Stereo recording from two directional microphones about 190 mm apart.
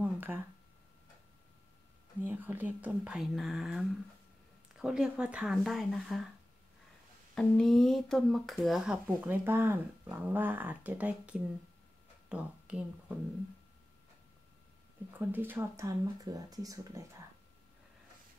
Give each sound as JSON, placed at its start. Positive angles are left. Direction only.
{"t": 0.0, "sound": "a sound", "side_deg": -10}
{"t": 2.2, "sound": "speech", "side_deg": -10}
{"t": 7.3, "sound": "speech", "side_deg": 5}
{"t": 15.1, "sound": "speech", "side_deg": -10}